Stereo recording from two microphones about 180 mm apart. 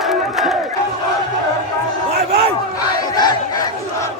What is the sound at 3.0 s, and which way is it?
Battle cry, 20° left (ahead or behind).